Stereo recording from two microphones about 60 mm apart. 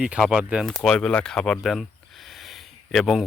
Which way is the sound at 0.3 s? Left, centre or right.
Centre.